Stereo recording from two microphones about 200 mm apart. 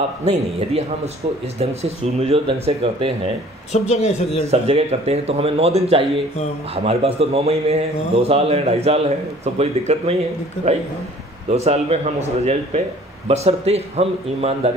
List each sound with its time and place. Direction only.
0.2 s speech: 30° right (ahead or behind)
3.9 s speech: 35° left (ahead or behind)
4.5 s a man's voice: 30° right (ahead or behind)
11.5 s speech: 30° right (ahead or behind)